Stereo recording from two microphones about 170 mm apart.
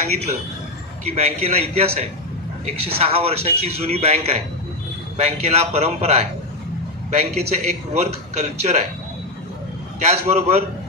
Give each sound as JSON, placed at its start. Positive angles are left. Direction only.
{"t": 0.1, "sound": "a man's voice", "side_deg": -40}
{"t": 10.3, "sound": "a man's voice", "side_deg": -40}